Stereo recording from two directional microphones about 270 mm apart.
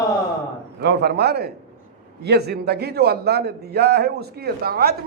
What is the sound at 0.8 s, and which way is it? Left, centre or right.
A man's voice, right.